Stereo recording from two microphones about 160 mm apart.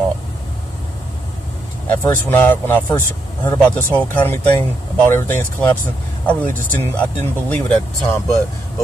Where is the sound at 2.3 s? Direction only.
10° left (ahead or behind).